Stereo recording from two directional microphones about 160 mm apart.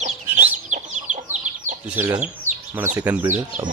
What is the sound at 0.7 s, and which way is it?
Chicken, 50° right (ahead or behind).